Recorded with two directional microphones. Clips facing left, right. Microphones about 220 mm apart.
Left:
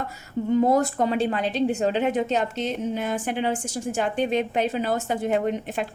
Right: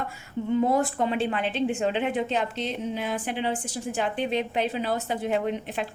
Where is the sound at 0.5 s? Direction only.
40° left (ahead or behind).